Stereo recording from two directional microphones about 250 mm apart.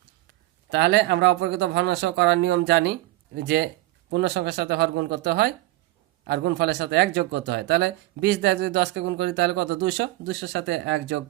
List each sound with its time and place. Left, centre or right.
0.7 s speech: right